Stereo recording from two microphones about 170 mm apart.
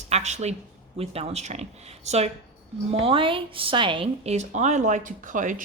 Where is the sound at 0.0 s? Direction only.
45° right (ahead or behind).